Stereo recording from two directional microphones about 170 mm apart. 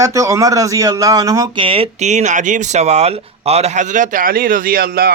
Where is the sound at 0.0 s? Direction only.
20° right (ahead or behind).